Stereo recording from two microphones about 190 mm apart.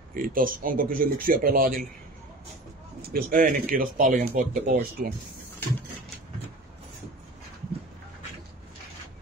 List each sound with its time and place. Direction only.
0.1 s speech: 45° right (ahead or behind)
3.0 s speech: 50° right (ahead or behind)